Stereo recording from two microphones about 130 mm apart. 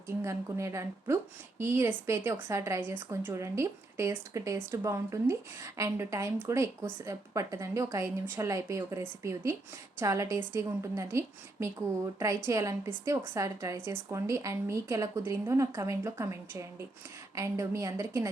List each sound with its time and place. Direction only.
0.2 s a woman's voice: 20° right (ahead or behind)
12.5 s a woman's voice: 20° right (ahead or behind)